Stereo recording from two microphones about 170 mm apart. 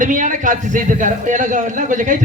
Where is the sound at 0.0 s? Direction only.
50° right (ahead or behind).